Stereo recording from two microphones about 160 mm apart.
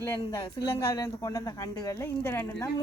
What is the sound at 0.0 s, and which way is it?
A woman's voice, 25° left (ahead or behind).